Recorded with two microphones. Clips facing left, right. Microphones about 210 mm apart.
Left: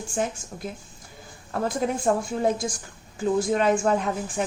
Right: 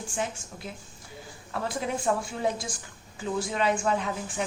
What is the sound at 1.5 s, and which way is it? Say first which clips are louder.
A woman's voice: left 5 dB; 45° left (ahead or behind).